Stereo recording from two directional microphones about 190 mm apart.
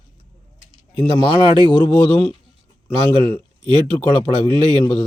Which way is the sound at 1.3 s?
25° right (ahead or behind).